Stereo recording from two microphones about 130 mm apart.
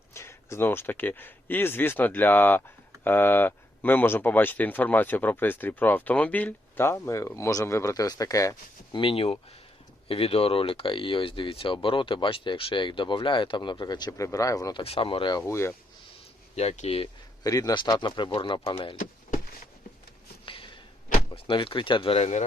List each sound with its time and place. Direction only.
0.1 s speech: 20° left (ahead or behind)
9.0 s speech: 45° left (ahead or behind)
14.8 s speech: 45° left (ahead or behind); by 15.7 s 20° left (ahead or behind)
16.6 s speech: 55° left (ahead or behind)
17.4 s speech: 25° left (ahead or behind)
20.4 s a sound: 40° left (ahead or behind)
21.3 s speech: 40° left (ahead or behind)